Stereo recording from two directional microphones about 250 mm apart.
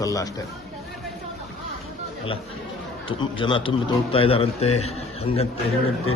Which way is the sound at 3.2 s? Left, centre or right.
Centre.